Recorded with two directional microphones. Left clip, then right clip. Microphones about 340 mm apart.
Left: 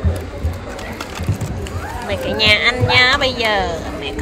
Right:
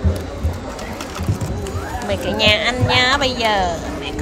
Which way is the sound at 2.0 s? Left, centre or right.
Centre.